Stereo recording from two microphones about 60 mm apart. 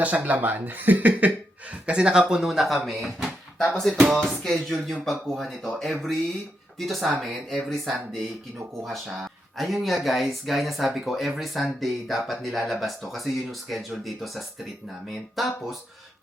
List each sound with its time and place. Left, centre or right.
0.0 s speech: right; by 15.8 s centre